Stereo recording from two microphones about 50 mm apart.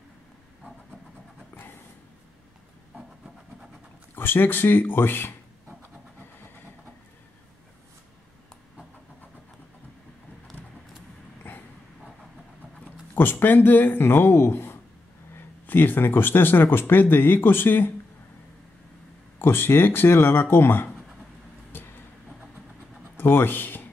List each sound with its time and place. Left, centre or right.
1.5 s a sound: left
4.1 s a man's voice: left
13.1 s a man's voice: left
19.3 s a man's voice: left
23.1 s speech: left